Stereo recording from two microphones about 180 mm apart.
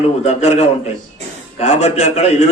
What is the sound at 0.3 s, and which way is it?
A man's voice, 35° left (ahead or behind).